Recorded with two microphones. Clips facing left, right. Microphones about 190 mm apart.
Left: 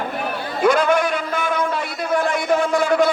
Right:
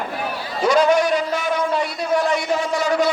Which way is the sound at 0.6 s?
55° left (ahead or behind).